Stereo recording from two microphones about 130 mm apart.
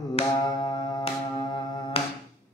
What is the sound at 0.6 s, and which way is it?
Music, 35° left (ahead or behind).